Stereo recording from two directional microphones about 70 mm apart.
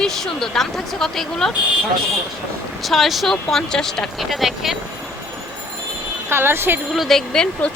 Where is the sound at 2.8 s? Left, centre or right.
Centre.